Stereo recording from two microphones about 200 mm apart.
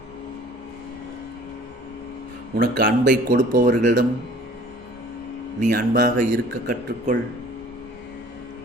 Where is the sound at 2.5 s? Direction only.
50° right (ahead or behind).